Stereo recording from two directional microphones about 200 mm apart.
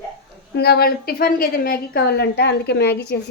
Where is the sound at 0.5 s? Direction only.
50° left (ahead or behind).